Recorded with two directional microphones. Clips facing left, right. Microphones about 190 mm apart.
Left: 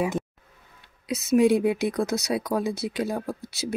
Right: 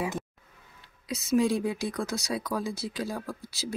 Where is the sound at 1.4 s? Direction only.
65° left (ahead or behind).